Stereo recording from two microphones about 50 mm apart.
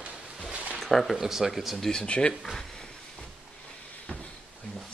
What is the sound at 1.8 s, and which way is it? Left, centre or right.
Speech, centre.